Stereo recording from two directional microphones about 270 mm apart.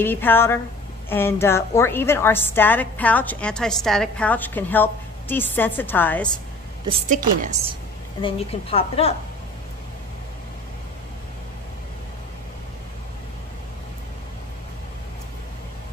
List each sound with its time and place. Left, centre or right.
0.0 s a woman's voice: centre
6.9 s a woman's voice: right
8.2 s a woman's voice: left